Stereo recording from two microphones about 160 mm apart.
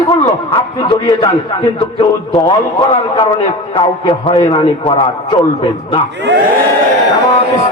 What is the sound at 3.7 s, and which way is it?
Speech, 30° left (ahead or behind).